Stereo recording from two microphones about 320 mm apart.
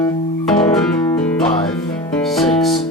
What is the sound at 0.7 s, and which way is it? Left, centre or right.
Music, centre.